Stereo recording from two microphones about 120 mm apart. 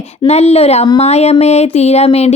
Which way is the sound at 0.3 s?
60° left (ahead or behind).